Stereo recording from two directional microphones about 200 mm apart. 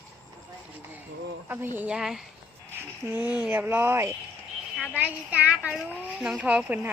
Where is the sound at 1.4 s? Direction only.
10° right (ahead or behind).